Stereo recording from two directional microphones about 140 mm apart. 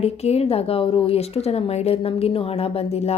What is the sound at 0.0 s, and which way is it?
Speech, 50° left (ahead or behind).